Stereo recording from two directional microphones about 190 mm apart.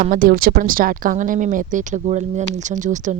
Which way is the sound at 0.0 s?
45° right (ahead or behind).